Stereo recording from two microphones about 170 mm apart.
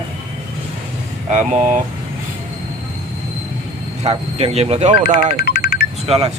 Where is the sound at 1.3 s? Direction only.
45° right (ahead or behind).